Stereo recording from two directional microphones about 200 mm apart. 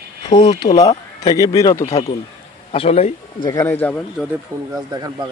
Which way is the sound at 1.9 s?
30° left (ahead or behind).